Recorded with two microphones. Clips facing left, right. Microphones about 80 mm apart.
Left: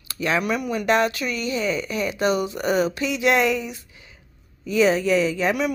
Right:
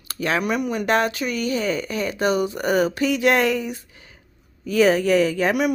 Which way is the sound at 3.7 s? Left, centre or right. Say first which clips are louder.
Right 5 dB; right.